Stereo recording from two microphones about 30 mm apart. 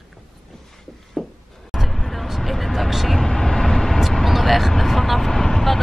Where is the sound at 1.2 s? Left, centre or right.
Centre.